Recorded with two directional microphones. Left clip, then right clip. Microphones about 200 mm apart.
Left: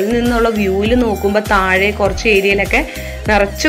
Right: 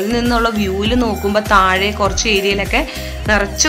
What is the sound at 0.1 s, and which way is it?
Speech, 5° left (ahead or behind).